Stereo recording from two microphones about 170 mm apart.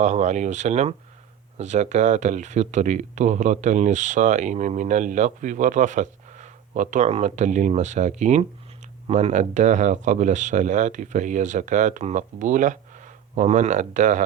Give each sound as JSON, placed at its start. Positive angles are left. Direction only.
{"t": 0.0, "sound": "speech", "side_deg": -45}